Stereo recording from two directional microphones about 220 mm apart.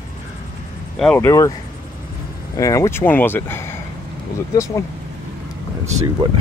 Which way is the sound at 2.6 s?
15° left (ahead or behind).